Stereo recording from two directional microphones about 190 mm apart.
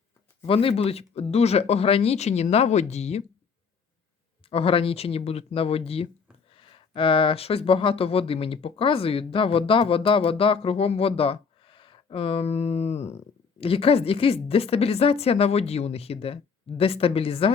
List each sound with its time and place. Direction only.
0.4 s speech: 30° left (ahead or behind)
4.4 s speech: 30° left (ahead or behind)